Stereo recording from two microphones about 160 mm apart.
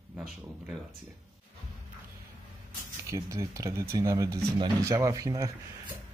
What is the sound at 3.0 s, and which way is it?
Speech, 20° right (ahead or behind).